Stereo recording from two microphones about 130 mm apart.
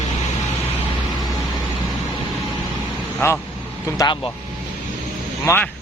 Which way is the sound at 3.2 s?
20° left (ahead or behind).